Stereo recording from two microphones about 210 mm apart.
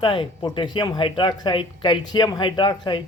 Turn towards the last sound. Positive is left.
turn(degrees=20)  # may be behind; listen again after turning